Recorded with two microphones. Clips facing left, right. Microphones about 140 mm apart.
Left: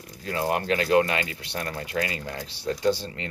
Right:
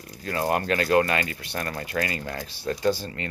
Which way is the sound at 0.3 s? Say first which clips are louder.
Right 1 dB; 15° left (ahead or behind).